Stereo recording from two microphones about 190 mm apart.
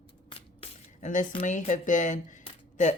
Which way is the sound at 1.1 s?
40° left (ahead or behind).